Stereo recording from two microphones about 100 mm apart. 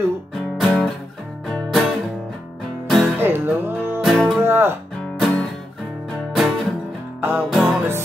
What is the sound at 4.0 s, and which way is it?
Music, centre (ahead or behind).